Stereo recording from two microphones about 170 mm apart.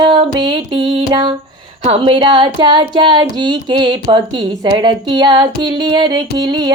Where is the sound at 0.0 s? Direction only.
30° right (ahead or behind).